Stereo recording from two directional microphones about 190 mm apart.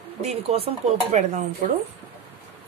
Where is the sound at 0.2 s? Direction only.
35° right (ahead or behind).